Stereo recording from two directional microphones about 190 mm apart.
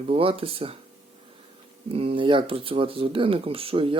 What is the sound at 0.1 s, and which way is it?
Speech, 30° right (ahead or behind).